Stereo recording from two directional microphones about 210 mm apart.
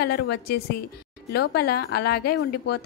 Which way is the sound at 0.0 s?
50° left (ahead or behind).